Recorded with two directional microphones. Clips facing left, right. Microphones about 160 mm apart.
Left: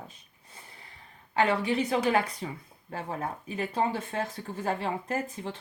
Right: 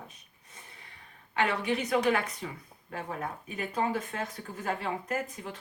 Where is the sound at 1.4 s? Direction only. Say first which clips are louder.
Left 3 dB; 30° left (ahead or behind).